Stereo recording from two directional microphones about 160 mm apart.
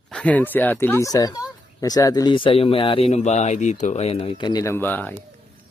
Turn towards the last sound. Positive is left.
turn(degrees=10)  # may be behind; listen again after turning